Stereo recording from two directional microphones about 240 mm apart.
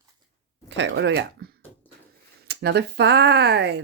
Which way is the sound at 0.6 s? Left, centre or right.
Right.